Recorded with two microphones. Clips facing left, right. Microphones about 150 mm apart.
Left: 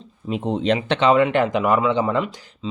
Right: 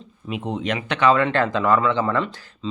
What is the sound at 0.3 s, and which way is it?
Speech, 30° left (ahead or behind).